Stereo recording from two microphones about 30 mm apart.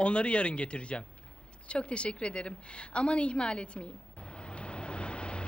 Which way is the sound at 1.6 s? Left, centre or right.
Left.